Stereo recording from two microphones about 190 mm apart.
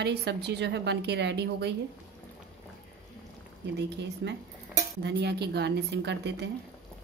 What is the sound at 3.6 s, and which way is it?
A woman's voice, 65° right (ahead or behind).